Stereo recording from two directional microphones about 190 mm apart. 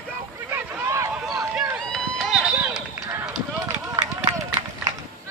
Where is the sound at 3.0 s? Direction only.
15° right (ahead or behind).